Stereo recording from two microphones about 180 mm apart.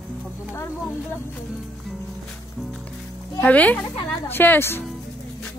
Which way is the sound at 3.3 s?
10° left (ahead or behind).